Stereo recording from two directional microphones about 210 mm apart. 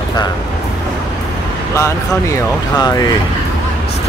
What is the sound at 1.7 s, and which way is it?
Speech, 15° left (ahead or behind).